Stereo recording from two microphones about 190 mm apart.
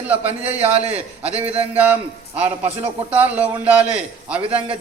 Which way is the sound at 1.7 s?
10° right (ahead or behind).